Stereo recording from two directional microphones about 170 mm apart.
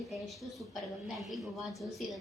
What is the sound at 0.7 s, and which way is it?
A woman's voice, centre (ahead or behind).